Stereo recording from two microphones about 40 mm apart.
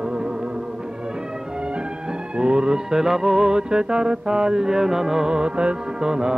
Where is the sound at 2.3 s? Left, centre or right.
Right.